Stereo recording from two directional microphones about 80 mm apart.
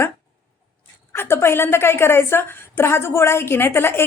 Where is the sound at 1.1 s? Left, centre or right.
Left.